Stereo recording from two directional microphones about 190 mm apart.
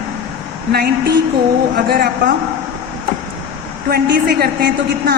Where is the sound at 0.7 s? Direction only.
55° right (ahead or behind).